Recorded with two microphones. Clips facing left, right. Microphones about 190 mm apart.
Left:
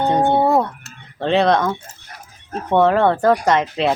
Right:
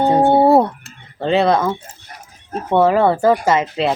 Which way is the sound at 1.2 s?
Centre (ahead or behind).